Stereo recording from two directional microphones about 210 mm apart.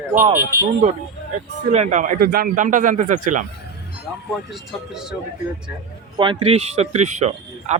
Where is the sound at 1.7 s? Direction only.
35° right (ahead or behind).